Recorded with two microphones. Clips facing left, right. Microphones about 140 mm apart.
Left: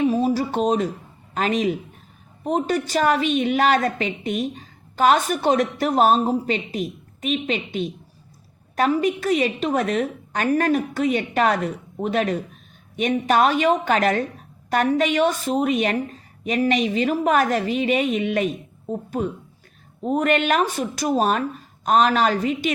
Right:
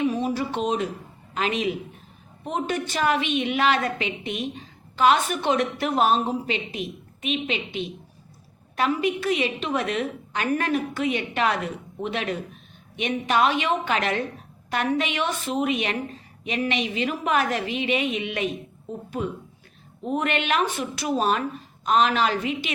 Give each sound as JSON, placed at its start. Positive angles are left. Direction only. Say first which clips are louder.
{"t": 0.0, "sound": "a sound", "louder": "left 4 dB", "side_deg": 35}
{"t": 1.3, "sound": "a man's voice", "louder": "left 4 dB", "side_deg": 40}
{"t": 20.1, "sound": "a woman's voice", "louder": "left 5 dB", "side_deg": 40}